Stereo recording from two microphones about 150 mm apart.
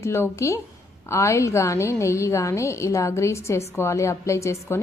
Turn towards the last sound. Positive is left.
turn(degrees=20)  # may be behind; listen again after turning